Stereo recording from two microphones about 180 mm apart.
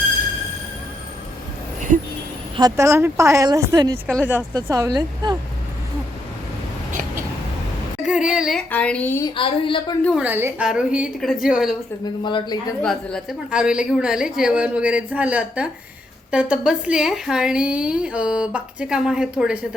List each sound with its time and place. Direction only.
2.6 s a woman's voice: 20° right (ahead or behind)
8.0 s a woman's voice: 5° right (ahead or behind); by 9.3 s 10° left (ahead or behind)
9.3 s a woman's voice: 30° left (ahead or behind)
10.2 s a woman's voice: 10° right (ahead or behind)
12.2 s a woman's voice: 25° left (ahead or behind)
12.8 s a woman's voice: 5° left (ahead or behind)